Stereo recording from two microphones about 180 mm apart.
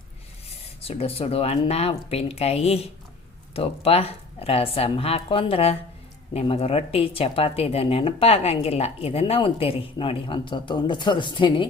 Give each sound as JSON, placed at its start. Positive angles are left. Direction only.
{"t": 0.8, "sound": "speech", "side_deg": 35}